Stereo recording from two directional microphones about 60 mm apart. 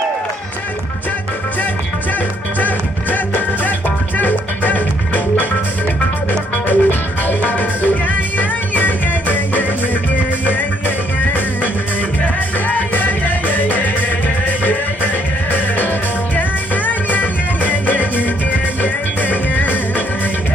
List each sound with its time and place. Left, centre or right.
4.2 s music: left
6.7 s music: left
12.6 s music: left
16.3 s music: left